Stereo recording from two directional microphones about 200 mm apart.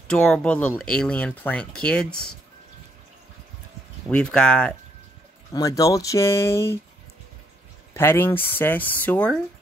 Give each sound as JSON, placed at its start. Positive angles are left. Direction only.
{"t": 0.1, "sound": "speech", "side_deg": 5}
{"t": 4.1, "sound": "speech", "side_deg": 5}
{"t": 5.5, "sound": "speech", "side_deg": 15}
{"t": 7.9, "sound": "speech", "side_deg": 10}